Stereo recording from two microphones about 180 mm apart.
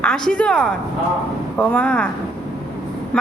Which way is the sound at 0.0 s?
5° left (ahead or behind).